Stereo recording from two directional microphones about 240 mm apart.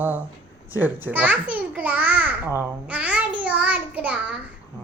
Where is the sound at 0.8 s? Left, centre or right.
Centre.